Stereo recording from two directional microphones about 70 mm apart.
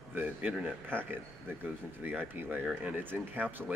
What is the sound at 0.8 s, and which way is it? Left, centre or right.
Speech, right.